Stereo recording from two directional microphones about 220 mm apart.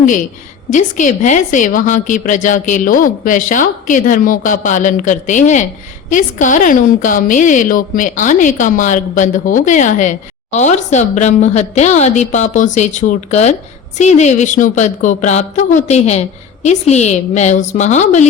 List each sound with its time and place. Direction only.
0.7 s a woman's voice: 35° left (ahead or behind)